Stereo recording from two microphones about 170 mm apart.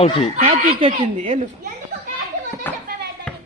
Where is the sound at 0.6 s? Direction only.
35° right (ahead or behind).